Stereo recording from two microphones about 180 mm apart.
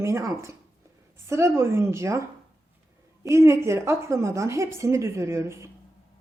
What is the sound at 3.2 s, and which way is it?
A woman's voice, 15° right (ahead or behind).